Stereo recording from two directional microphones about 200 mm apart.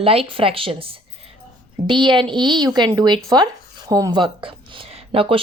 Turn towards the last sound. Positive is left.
turn(degrees=-25)  # may be behind; listen again after turning